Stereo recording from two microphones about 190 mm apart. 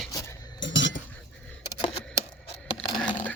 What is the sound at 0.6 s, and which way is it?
Cutlery, 75° left (ahead or behind).